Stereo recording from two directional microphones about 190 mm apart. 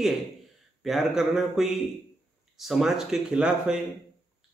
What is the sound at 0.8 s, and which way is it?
A man's voice, centre (ahead or behind).